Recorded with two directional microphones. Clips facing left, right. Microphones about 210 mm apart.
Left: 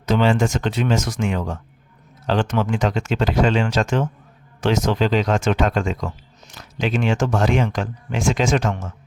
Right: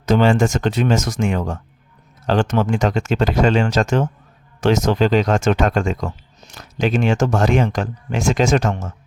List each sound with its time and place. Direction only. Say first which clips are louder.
0.0 s speech: right 3 dB; 45° right (ahead or behind)